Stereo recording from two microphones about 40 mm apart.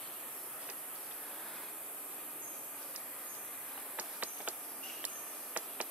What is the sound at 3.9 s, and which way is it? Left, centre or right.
Insect, right.